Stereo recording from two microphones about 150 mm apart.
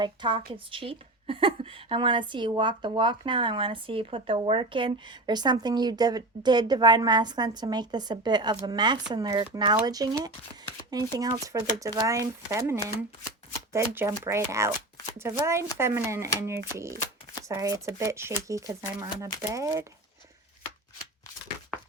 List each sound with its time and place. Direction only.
0.0 s a woman's voice: 30° right (ahead or behind)